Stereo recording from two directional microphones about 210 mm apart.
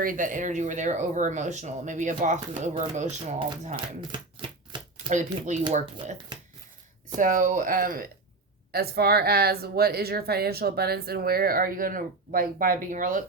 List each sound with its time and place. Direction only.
0.0 s speech: 40° right (ahead or behind)
3.8 s shuffling cards: 20° right (ahead or behind)
5.0 s speech: 20° right (ahead or behind)
5.7 s speech: 35° right (ahead or behind)
7.2 s a woman's voice: 40° right (ahead or behind)